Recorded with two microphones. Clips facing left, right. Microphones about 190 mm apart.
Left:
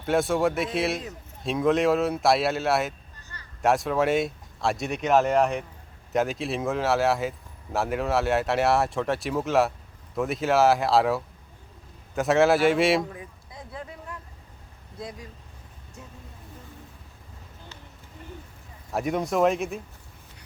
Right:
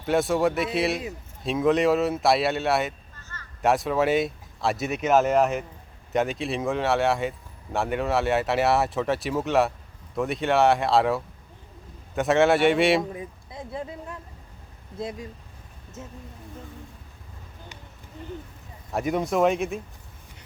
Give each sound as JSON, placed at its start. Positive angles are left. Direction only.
{"t": 0.0, "sound": "speech", "side_deg": 0}
{"t": 3.2, "sound": "a sound", "side_deg": 15}
{"t": 3.6, "sound": "speech", "side_deg": 0}
{"t": 13.1, "sound": "a sound", "side_deg": -25}
{"t": 14.9, "sound": "speech", "side_deg": -25}
{"t": 18.9, "sound": "speech", "side_deg": 0}